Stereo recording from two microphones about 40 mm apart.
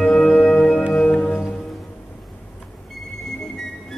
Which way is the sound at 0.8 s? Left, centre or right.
Left.